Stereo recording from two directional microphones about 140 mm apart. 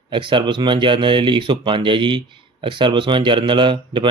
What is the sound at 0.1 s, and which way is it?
Speech, 35° right (ahead or behind).